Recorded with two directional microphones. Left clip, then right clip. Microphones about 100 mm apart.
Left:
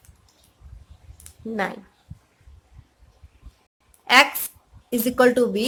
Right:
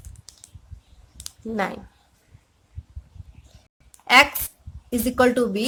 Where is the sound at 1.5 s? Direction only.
40° right (ahead or behind).